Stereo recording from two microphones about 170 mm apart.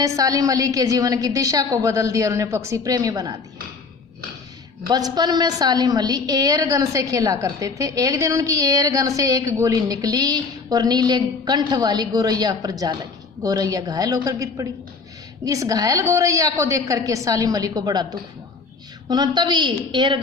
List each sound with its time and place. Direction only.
0.0 s a woman's voice: 20° right (ahead or behind)
4.9 s a woman's voice: 25° right (ahead or behind)